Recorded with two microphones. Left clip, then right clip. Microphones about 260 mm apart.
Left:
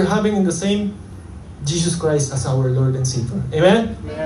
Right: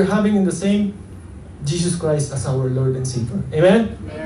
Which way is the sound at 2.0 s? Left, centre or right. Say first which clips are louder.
Left 2 dB; left.